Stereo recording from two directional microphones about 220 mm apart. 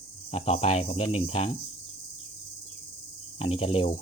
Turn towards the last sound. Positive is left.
turn(degrees=25)  # may be behind; listen again after turning